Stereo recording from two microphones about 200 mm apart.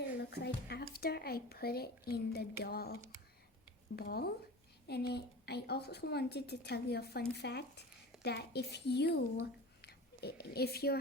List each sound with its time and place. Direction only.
0.2 s speech: 55° left (ahead or behind)
3.9 s a woman's voice: 50° left (ahead or behind)